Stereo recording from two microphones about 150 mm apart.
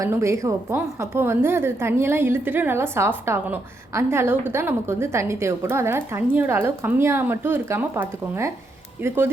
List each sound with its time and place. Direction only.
0.0 s a woman's voice: 20° right (ahead or behind)